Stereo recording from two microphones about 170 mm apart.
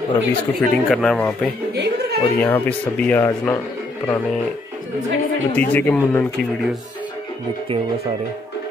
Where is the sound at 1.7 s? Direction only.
90° right.